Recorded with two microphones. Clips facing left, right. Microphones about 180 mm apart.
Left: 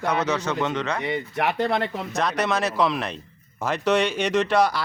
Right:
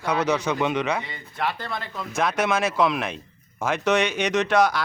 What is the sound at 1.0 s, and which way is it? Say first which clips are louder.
Speech: left 5 dB; 70° left (ahead or behind).